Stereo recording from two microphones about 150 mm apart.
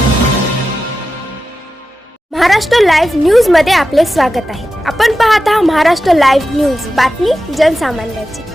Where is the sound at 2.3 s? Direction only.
Centre (ahead or behind).